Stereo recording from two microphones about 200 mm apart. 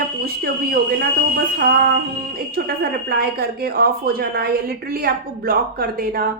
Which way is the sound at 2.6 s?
50° right (ahead or behind).